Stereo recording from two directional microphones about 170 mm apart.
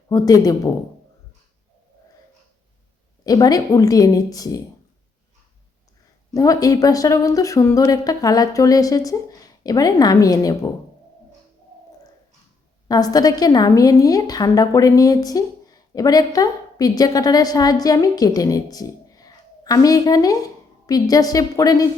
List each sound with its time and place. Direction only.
0.1 s a woman's voice: 20° left (ahead or behind)
3.2 s a woman's voice: 20° left (ahead or behind)
6.3 s a woman's voice: 20° left (ahead or behind)
12.9 s a woman's voice: 20° left (ahead or behind)